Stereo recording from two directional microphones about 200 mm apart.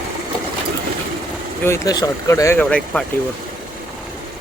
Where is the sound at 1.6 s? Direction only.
15° left (ahead or behind).